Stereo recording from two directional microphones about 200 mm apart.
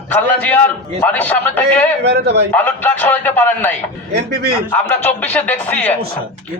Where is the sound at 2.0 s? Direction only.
55° right (ahead or behind).